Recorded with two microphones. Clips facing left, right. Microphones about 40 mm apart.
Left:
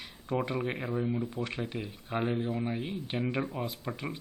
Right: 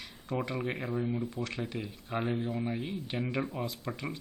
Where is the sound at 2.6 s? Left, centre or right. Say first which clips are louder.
Left 1 dB; centre.